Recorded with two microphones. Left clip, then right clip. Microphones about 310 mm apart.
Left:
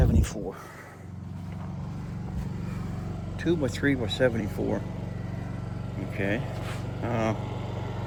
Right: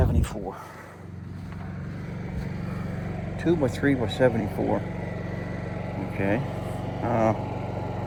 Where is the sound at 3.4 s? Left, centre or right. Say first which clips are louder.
Right 3 dB; centre.